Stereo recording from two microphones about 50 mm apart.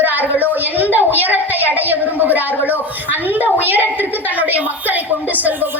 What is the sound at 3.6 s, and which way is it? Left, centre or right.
A woman's voice, right.